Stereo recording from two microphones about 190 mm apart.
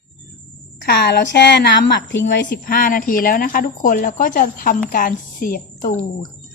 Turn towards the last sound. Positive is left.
turn(degrees=45)  # may be behind; listen again after turning